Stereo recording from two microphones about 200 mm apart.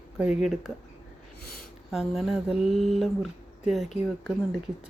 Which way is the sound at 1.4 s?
50° left (ahead or behind).